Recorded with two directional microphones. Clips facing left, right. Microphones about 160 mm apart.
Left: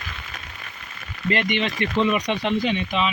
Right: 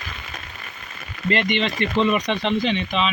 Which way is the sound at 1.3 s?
10° left (ahead or behind).